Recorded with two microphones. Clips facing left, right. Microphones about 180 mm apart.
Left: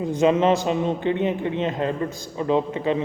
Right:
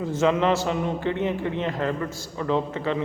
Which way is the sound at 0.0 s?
15° left (ahead or behind).